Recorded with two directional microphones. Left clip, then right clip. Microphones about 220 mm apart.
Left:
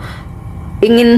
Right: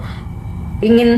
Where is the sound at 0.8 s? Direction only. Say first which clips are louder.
Left 3 dB; 55° left (ahead or behind).